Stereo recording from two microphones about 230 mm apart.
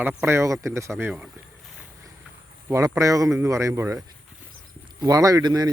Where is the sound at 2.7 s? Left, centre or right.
Centre.